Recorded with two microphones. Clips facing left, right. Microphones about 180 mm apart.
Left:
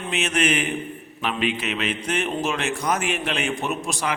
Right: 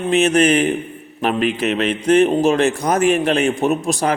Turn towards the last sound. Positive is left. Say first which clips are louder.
# right 9 dB
turn(degrees=-40)  # may be behind; listen again after turning